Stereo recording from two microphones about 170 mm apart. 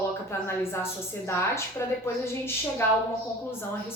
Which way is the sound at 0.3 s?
15° left (ahead or behind).